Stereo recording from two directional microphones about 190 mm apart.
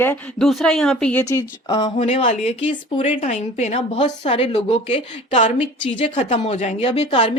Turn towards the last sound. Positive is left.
turn(degrees=30)  # may be behind; listen again after turning